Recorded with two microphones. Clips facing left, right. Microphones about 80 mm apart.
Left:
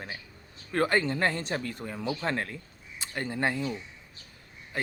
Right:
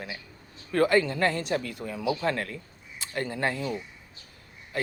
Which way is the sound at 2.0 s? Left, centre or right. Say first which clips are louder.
Right 5 dB; centre.